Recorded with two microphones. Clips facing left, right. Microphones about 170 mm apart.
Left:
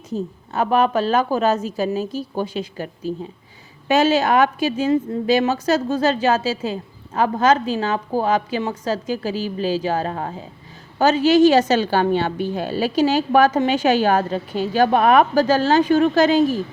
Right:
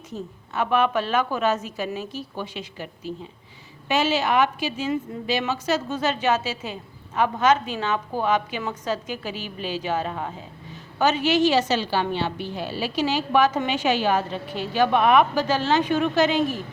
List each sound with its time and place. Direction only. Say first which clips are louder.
0.1 s a woman's voice: left 7 dB; 40° left (ahead or behind)